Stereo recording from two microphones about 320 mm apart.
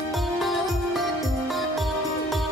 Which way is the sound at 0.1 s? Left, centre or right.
Centre.